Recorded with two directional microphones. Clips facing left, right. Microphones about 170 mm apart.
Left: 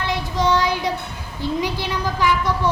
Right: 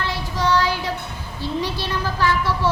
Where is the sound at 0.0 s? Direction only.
20° left (ahead or behind).